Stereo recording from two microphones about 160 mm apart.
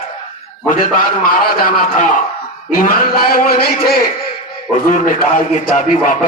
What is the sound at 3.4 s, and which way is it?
Speech, 70° left (ahead or behind).